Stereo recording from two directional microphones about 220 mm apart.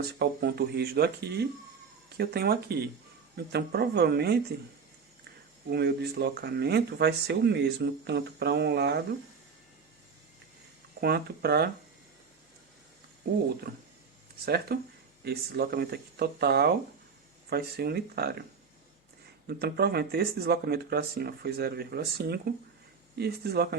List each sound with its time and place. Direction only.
0.2 s speech: 50° right (ahead or behind)
5.7 s speech: 45° right (ahead or behind)
11.0 s speech: 45° right (ahead or behind)
14.4 s speech: 45° right (ahead or behind)
19.5 s speech: 45° right (ahead or behind)